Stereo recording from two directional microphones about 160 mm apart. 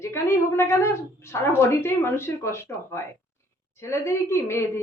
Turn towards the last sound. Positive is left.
turn(degrees=15)  # may be behind; listen again after turning